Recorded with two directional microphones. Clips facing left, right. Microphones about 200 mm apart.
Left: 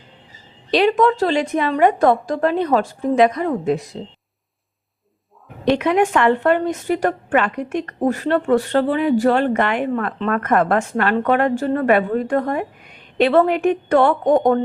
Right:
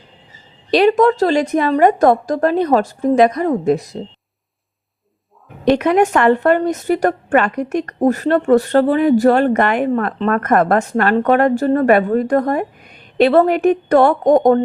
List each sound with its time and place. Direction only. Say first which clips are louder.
0.7 s a woman's voice: right 3 dB; 40° right (ahead or behind)
5.6 s a woman's voice: right 3 dB; 45° right (ahead or behind)